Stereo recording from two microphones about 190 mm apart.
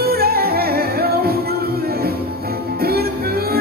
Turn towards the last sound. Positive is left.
turn(degrees=-55)  # may be behind; listen again after turning